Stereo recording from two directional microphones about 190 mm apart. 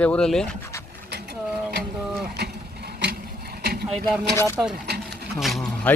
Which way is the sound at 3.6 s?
55° right (ahead or behind).